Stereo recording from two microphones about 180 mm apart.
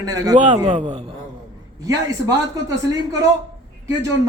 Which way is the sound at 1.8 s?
20° right (ahead or behind).